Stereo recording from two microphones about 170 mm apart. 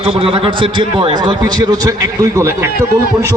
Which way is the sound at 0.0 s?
35° right (ahead or behind).